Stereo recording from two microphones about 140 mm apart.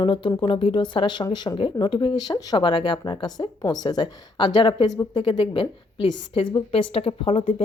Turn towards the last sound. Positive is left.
turn(degrees=45)  # may be behind; listen again after turning